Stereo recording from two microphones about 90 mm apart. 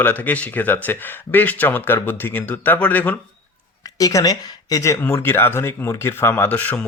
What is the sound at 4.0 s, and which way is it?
Speech, 40° left (ahead or behind).